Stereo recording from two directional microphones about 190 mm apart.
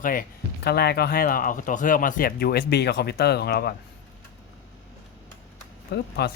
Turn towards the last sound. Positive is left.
turn(degrees=60)  # may be behind; listen again after turning